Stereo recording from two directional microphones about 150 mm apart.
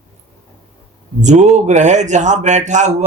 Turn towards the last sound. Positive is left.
turn(degrees=-50)  # may be behind; listen again after turning